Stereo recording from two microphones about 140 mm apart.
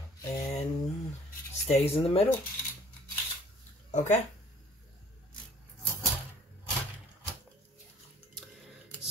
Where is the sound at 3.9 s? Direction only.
60° left (ahead or behind).